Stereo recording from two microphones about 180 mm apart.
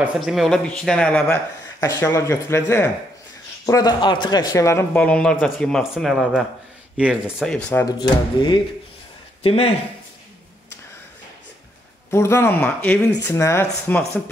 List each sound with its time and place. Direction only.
0.0 s speech: centre (ahead or behind)
1.8 s speech: 15° left (ahead or behind); by 7.5 s 5° right (ahead or behind)
7.5 s speech: 10° left (ahead or behind)
8.0 s speech: 25° left (ahead or behind)
12.1 s speech: 15° left (ahead or behind)